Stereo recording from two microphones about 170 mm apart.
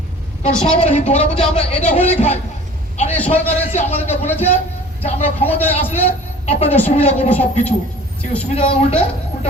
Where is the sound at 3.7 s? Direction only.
40° left (ahead or behind).